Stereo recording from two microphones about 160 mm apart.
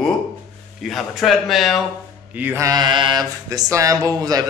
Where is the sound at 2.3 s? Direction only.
15° right (ahead or behind).